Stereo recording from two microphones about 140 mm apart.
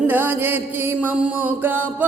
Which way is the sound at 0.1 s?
15° right (ahead or behind).